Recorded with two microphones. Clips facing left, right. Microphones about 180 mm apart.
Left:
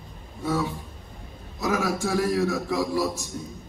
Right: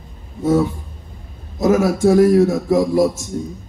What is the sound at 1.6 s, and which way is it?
A man's voice, 45° right (ahead or behind).